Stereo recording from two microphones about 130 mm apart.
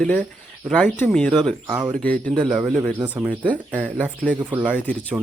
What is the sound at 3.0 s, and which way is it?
Speech, 35° right (ahead or behind).